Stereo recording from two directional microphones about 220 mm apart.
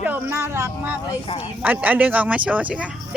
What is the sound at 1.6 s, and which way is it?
Speech, 5° right (ahead or behind).